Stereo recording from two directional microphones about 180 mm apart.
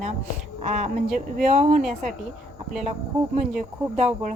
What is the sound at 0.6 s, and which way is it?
Speech, 45° right (ahead or behind).